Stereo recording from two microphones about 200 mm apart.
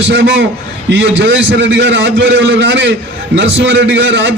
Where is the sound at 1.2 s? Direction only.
65° right (ahead or behind).